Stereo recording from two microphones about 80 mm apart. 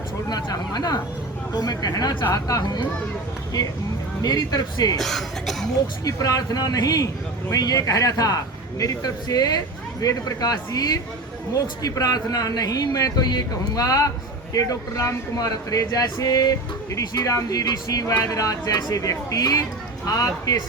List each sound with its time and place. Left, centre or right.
0.3 s a man's voice: left
4.2 s speech: left
4.9 s speech: centre
6.1 s a man's voice: left